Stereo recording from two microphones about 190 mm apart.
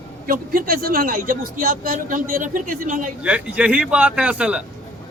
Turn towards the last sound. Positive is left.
turn(degrees=-5)  # may be behind; listen again after turning